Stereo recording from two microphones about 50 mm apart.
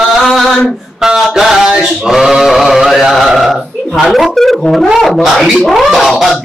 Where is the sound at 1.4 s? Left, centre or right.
Centre.